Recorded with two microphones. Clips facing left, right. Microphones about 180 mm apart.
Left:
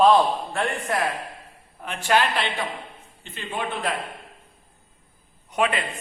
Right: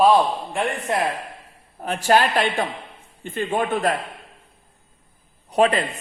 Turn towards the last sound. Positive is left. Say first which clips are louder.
# right 6 dB
turn(degrees=-35)  # may be behind; listen again after turning